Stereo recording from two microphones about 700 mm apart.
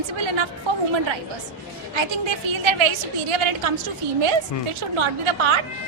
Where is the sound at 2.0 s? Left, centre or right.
Right.